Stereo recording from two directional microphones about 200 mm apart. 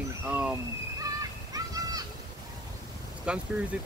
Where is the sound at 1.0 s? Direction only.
15° right (ahead or behind).